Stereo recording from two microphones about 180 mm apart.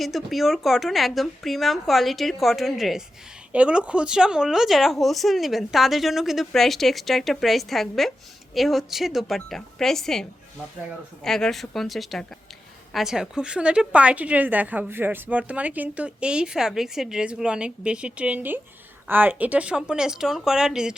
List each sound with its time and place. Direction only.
0.0 s a woman's voice: centre (ahead or behind)